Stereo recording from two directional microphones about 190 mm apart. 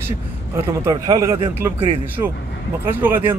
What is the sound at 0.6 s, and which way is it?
A man's voice, 15° right (ahead or behind).